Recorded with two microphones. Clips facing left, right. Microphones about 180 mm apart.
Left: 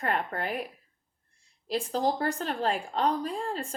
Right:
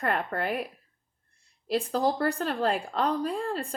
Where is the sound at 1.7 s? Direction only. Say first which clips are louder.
Right 2 dB; 40° right (ahead or behind).